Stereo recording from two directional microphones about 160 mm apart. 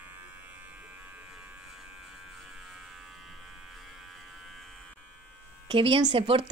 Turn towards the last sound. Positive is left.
turn(degrees=-35)  # may be behind; listen again after turning